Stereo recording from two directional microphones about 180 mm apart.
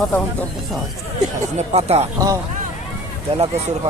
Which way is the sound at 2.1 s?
20° right (ahead or behind).